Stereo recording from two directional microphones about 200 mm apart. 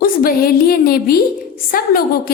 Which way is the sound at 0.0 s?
45° left (ahead or behind).